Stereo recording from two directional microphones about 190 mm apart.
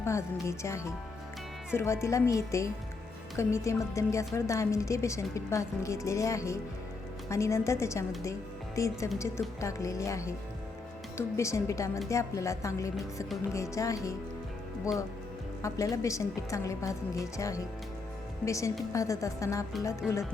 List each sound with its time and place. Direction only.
0.0 s a woman's voice: 15° left (ahead or behind)
15.6 s a woman's voice: 15° left (ahead or behind)